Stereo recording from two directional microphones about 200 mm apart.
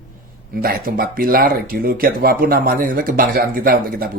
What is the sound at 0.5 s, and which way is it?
Speech, 45° right (ahead or behind).